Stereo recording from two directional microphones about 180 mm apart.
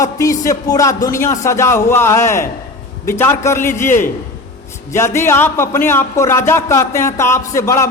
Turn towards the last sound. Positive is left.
turn(degrees=15)  # may be behind; listen again after turning